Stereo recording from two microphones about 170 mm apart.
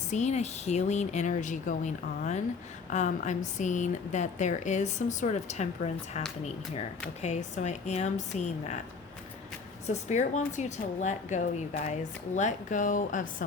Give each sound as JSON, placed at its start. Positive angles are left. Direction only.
{"t": 0.1, "sound": "a woman's voice", "side_deg": 45}
{"t": 9.8, "sound": "a woman's voice", "side_deg": 45}